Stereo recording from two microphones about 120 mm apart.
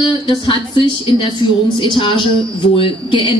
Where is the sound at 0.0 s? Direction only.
45° left (ahead or behind).